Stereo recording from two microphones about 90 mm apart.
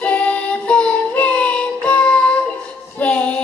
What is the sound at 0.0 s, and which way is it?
Child singing, 15° left (ahead or behind).